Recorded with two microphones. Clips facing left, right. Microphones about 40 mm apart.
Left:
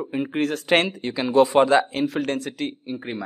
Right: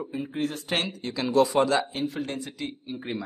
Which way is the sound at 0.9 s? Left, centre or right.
Left.